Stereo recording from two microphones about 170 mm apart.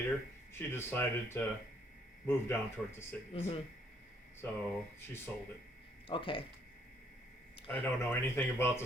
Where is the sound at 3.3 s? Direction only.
35° left (ahead or behind).